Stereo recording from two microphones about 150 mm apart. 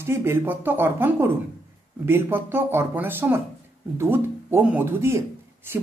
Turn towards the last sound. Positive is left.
turn(degrees=-15)  # may be behind; listen again after turning